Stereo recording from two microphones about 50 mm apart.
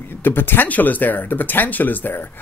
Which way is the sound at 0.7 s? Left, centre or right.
Left.